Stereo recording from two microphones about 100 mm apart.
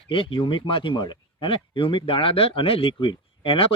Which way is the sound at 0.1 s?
60° left (ahead or behind).